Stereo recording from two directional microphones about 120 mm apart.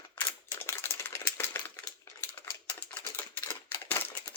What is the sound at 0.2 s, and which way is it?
Typewriter, 20° left (ahead or behind).